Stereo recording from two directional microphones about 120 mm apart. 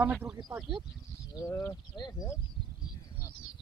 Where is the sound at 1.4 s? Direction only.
20° left (ahead or behind).